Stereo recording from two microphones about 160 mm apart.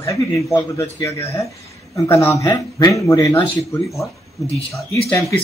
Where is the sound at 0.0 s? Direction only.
20° left (ahead or behind).